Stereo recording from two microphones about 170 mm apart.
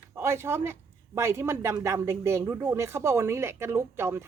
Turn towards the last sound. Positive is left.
turn(degrees=-15)  # may be behind; listen again after turning